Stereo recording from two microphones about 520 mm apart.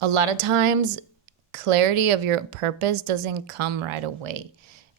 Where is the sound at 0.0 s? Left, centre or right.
Right.